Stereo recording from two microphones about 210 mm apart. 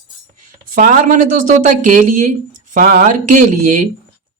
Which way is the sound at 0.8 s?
35° right (ahead or behind).